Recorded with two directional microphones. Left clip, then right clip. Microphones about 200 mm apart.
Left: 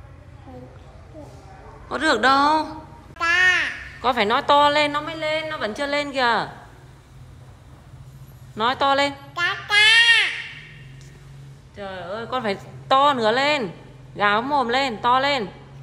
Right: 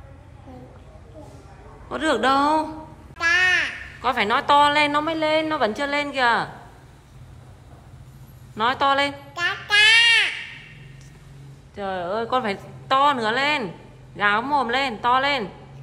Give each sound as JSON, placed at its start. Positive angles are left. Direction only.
{"t": 1.9, "sound": "a woman's voice", "side_deg": 0}
{"t": 3.2, "sound": "babbling", "side_deg": 5}
{"t": 5.0, "sound": "a woman's voice", "side_deg": -10}
{"t": 5.7, "sound": "a woman's voice", "side_deg": 0}
{"t": 8.5, "sound": "a sound", "side_deg": 0}
{"t": 11.7, "sound": "a woman's voice", "side_deg": -10}